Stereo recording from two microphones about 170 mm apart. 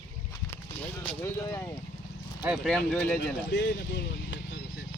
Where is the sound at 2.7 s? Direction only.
5° left (ahead or behind).